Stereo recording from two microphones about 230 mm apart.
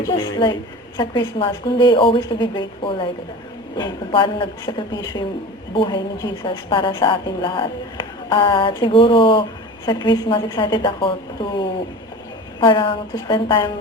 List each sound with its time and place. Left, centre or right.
0.0 s a woman's voice: centre